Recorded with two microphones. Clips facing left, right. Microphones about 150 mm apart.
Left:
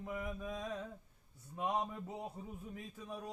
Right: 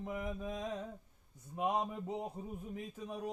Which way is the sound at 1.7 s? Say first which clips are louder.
Right 1 dB; 15° right (ahead or behind).